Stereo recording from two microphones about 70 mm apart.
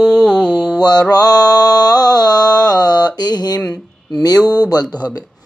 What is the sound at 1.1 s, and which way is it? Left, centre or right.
Mantra, left.